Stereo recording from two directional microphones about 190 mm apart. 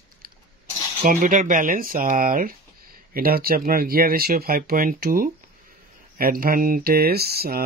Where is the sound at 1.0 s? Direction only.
45° right (ahead or behind).